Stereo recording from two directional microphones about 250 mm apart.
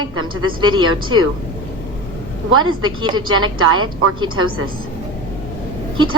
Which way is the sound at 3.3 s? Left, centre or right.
Right.